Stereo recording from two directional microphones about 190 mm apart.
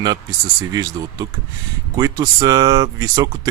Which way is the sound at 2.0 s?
20° right (ahead or behind).